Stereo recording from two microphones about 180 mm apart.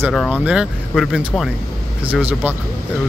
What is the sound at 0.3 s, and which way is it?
Speech, 5° right (ahead or behind).